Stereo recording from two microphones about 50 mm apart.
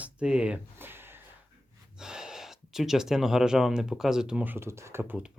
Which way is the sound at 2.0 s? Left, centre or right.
Centre.